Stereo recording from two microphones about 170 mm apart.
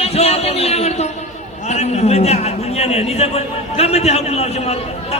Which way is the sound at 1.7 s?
40° left (ahead or behind).